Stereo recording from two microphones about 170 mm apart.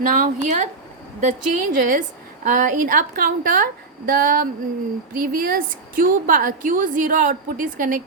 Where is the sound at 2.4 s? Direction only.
50° right (ahead or behind).